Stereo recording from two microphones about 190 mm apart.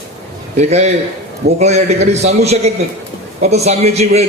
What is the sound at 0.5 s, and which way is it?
A man's voice, 35° right (ahead or behind).